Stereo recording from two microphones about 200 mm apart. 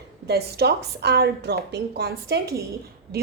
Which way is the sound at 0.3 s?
55° right (ahead or behind).